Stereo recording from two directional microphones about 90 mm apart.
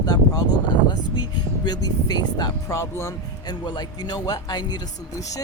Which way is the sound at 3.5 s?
50° left (ahead or behind).